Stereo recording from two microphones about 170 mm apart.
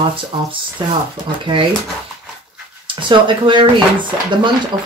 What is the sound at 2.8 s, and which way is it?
Speech, 30° right (ahead or behind).